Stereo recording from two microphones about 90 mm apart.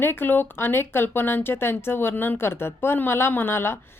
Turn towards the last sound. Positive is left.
turn(degrees=25)  # may be behind; listen again after turning